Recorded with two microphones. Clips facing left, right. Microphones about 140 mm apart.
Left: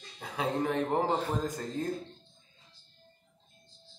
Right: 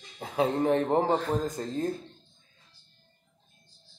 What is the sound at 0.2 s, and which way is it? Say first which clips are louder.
Speech: right 5 dB; 30° right (ahead or behind).